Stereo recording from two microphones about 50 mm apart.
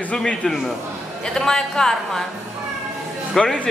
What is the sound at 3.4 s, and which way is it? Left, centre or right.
Speech, centre.